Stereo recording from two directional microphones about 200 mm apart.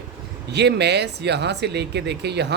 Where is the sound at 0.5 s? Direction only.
55° right (ahead or behind).